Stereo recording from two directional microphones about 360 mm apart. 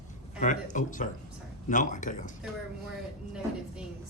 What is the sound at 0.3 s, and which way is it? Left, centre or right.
Speech, left.